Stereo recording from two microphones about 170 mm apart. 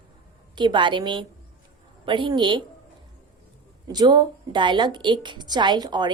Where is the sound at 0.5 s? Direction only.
25° right (ahead or behind).